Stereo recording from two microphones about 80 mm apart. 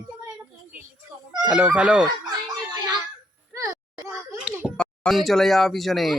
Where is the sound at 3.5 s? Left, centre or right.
Right.